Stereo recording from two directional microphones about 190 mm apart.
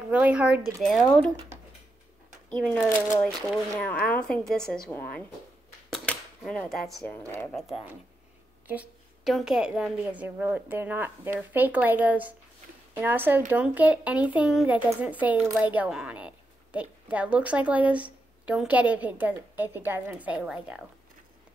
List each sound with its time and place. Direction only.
0.1 s speech: 5° right (ahead or behind)
2.6 s a woman's voice: 5° left (ahead or behind)
5.9 s a sound: centre (ahead or behind)
7.0 s a woman's voice: 10° left (ahead or behind)